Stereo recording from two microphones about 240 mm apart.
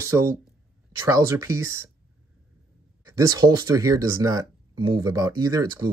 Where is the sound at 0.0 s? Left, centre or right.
Centre.